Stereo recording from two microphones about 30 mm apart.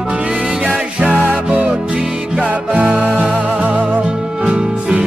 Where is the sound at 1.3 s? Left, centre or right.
Right.